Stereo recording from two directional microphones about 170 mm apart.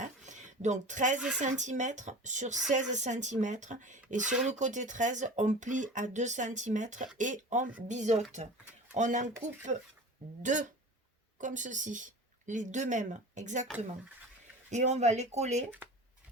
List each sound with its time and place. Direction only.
0.0 s a sound: 45° right (ahead or behind)
1.4 s speech: 45° right (ahead or behind)
14.7 s speech: 45° right (ahead or behind)